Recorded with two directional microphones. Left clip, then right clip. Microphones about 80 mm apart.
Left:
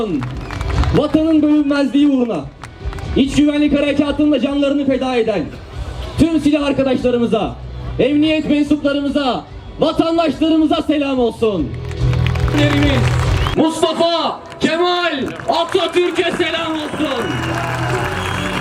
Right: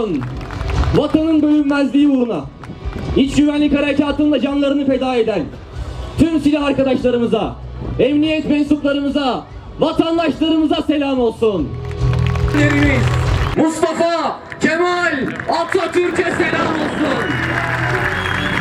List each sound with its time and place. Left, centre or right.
1.1 s a man's voice: centre
12.2 s music: centre
13.6 s a man's voice: centre
17.4 s music: left